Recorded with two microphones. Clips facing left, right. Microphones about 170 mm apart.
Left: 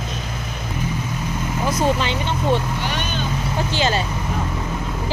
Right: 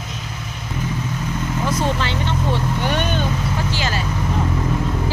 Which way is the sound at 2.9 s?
55° right (ahead or behind).